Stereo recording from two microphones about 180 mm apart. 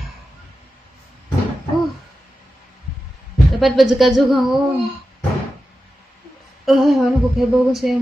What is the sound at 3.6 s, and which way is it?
Speech, centre (ahead or behind).